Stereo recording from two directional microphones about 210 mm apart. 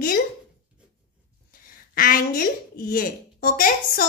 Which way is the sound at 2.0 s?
45° left (ahead or behind).